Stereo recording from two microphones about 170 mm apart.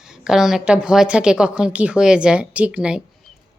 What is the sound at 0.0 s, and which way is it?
A woman's voice, 5° right (ahead or behind).